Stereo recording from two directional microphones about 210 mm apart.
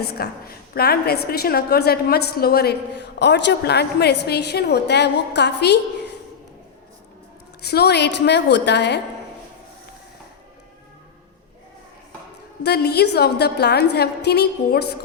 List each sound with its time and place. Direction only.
0.1 s a woman's voice: 50° left (ahead or behind)
7.6 s a woman's voice: 50° left (ahead or behind)
12.6 s a woman's voice: 50° left (ahead or behind)